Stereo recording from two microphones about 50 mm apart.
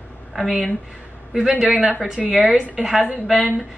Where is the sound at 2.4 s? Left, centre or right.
Centre.